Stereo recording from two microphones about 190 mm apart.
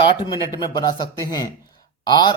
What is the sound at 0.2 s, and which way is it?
Speech, 20° left (ahead or behind).